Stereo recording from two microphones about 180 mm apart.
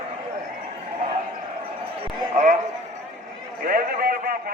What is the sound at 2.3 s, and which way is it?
Speech, 45° right (ahead or behind).